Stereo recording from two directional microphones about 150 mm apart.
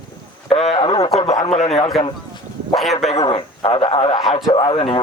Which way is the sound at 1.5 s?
45° left (ahead or behind).